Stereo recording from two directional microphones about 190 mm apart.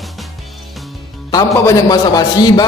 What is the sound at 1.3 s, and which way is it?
Speech, 20° left (ahead or behind).